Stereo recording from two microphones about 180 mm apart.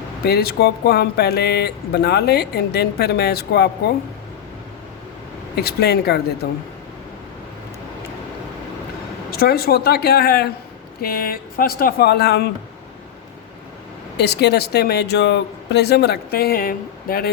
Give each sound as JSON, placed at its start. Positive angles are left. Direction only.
{"t": 0.3, "sound": "speech", "side_deg": 60}
{"t": 5.5, "sound": "speech", "side_deg": 65}
{"t": 9.3, "sound": "speech", "side_deg": 60}
{"t": 14.2, "sound": "speech", "side_deg": 65}